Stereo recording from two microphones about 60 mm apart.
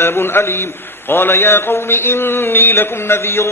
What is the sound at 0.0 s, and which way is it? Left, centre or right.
Mantra, left.